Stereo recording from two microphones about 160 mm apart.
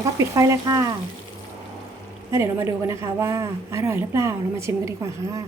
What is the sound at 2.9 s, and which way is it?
Speech, 20° right (ahead or behind).